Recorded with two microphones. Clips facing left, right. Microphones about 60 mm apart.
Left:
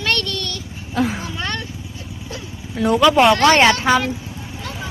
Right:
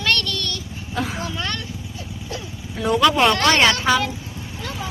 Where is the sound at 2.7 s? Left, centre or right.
Centre.